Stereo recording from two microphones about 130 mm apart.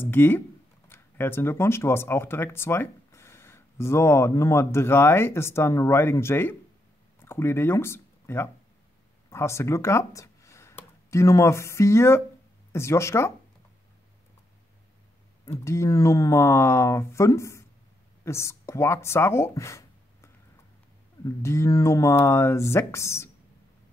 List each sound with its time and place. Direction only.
0.0 s speech: 15° left (ahead or behind)
15.4 s speech: 20° left (ahead or behind)